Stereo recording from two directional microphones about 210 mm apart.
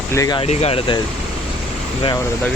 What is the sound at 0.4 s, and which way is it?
Speech, 30° left (ahead or behind).